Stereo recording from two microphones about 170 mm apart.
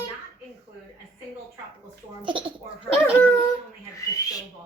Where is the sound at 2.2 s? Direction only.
30° right (ahead or behind).